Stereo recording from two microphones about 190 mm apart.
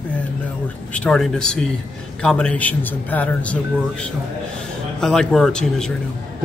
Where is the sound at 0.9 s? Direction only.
5° left (ahead or behind).